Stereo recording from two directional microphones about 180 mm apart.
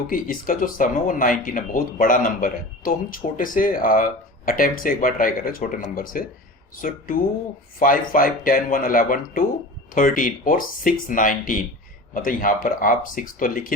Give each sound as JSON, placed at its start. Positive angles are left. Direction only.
{"t": 0.1, "sound": "speech", "side_deg": 50}